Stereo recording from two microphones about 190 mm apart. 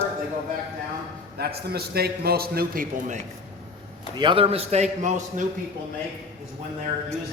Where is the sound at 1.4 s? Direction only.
55° right (ahead or behind).